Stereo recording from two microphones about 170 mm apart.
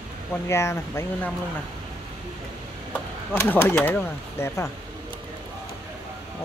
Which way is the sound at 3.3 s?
15° left (ahead or behind).